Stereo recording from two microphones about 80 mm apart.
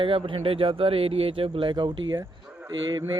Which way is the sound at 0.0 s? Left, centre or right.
Right.